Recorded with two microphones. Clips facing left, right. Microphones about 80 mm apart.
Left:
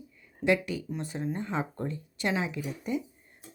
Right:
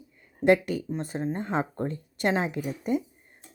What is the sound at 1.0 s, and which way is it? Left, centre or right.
Speech, right.